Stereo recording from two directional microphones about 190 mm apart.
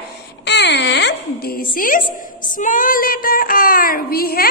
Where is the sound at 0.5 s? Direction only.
65° left (ahead or behind).